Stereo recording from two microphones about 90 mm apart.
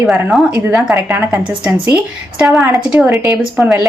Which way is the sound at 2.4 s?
Centre (ahead or behind).